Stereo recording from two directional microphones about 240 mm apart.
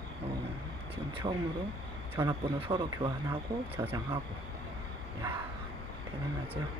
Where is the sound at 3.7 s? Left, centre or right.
Centre.